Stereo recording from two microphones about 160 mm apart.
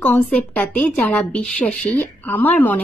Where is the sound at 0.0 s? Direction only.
10° left (ahead or behind).